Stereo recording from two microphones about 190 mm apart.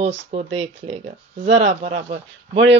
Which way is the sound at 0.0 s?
35° right (ahead or behind).